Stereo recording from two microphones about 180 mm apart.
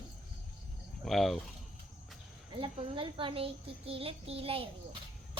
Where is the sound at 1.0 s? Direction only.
Centre (ahead or behind).